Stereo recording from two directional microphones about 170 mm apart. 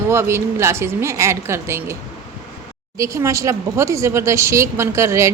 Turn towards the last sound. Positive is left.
turn(degrees=-15)  # may be behind; listen again after turning